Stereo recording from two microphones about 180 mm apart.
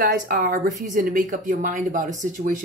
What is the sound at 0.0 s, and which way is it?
Speech, 50° right (ahead or behind).